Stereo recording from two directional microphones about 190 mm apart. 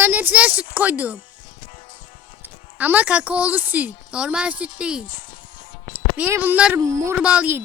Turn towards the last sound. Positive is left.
turn(degrees=-10)  # may be behind; listen again after turning